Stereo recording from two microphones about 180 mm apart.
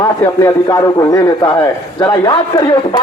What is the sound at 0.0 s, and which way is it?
A man's voice, 20° left (ahead or behind).